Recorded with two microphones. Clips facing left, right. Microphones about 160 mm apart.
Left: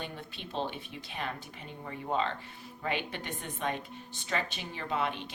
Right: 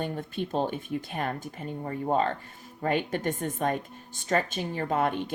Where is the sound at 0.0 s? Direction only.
45° right (ahead or behind).